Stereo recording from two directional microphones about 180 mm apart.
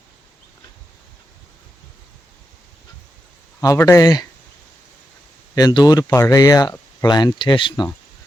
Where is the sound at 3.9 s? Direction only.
20° left (ahead or behind).